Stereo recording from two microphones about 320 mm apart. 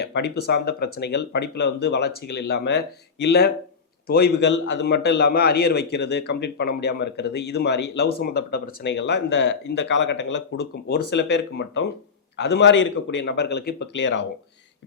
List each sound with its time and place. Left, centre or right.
0.0 s a man's voice: left